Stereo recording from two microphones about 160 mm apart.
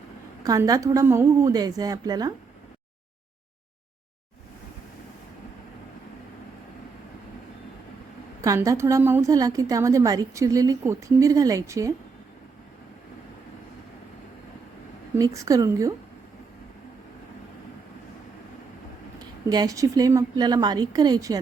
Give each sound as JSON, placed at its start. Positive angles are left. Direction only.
{"t": 0.4, "sound": "a woman's voice", "side_deg": -20}
{"t": 8.4, "sound": "a woman's voice", "side_deg": -20}
{"t": 15.1, "sound": "a woman's voice", "side_deg": -20}
{"t": 19.5, "sound": "a woman's voice", "side_deg": -25}